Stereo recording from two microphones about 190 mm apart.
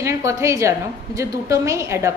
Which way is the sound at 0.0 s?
15° right (ahead or behind).